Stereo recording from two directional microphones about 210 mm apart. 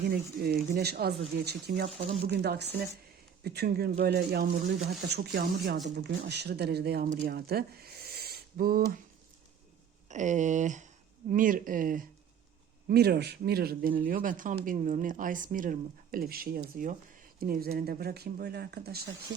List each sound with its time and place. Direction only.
0.0 s speech: 50° right (ahead or behind)
10.1 s speech: 35° right (ahead or behind)